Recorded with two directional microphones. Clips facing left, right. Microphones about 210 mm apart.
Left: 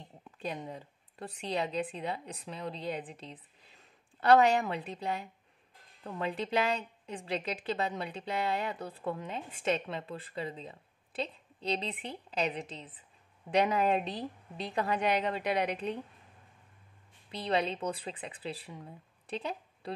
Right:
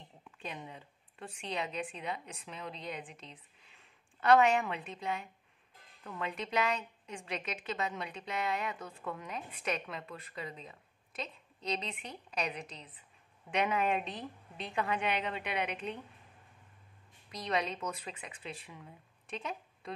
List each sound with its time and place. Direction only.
0.2 s a woman's voice: 35° left (ahead or behind)
17.3 s a woman's voice: 30° left (ahead or behind)